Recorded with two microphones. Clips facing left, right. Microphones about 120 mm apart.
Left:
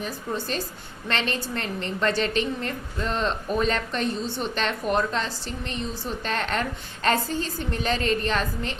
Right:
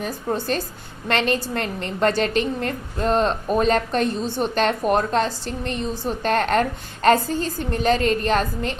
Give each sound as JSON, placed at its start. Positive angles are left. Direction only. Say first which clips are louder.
{"t": 0.0, "sound": "a woman's voice", "louder": "right 5 dB", "side_deg": -50}